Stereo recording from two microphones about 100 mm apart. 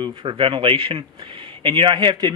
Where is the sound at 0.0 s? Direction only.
55° right (ahead or behind).